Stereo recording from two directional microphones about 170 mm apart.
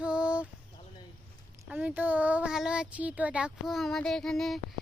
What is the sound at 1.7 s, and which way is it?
A child's voice, 10° right (ahead or behind).